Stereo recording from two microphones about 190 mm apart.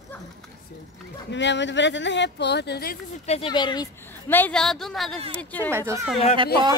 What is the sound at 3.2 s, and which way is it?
Speech, 30° left (ahead or behind).